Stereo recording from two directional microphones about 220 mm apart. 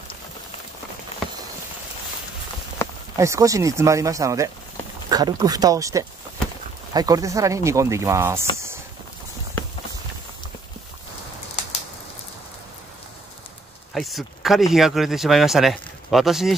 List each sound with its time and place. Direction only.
2.8 s a sound: 10° left (ahead or behind)
3.2 s speech: 15° right (ahead or behind)
13.9 s speech: centre (ahead or behind)